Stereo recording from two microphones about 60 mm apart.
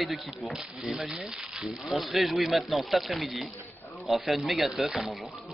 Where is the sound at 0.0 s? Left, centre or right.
Centre.